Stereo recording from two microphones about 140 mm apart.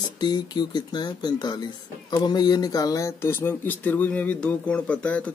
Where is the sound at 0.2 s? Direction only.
30° left (ahead or behind).